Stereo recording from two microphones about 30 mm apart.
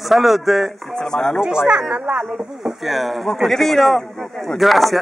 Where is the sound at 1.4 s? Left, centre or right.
Right.